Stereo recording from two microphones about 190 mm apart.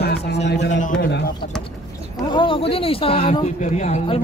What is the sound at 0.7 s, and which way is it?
Speech, 40° left (ahead or behind).